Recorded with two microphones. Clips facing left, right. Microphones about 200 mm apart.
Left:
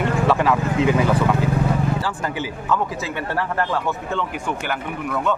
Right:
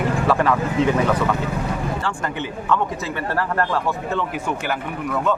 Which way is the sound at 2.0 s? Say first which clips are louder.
Left 1 dB; 5° left (ahead or behind).